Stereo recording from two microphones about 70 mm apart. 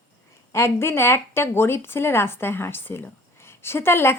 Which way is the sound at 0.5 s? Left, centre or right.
Left.